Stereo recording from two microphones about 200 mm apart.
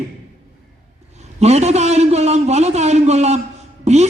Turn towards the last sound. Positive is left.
turn(degrees=-35)  # may be behind; listen again after turning